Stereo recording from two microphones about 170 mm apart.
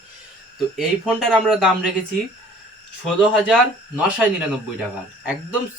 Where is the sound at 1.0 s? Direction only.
Centre (ahead or behind).